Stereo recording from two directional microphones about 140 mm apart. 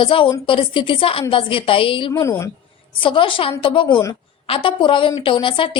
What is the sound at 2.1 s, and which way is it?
Speech, 20° left (ahead or behind).